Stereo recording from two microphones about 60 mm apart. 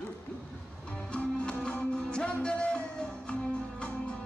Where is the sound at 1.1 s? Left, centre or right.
Centre.